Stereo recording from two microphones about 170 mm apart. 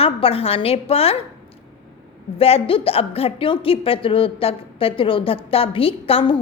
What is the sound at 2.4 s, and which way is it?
A woman's voice, 35° left (ahead or behind).